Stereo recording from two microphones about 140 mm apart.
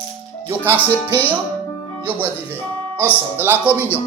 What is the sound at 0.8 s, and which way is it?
Speech, 15° left (ahead or behind).